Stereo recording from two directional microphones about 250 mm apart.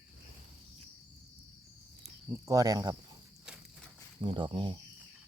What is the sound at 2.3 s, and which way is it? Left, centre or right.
Speech, centre.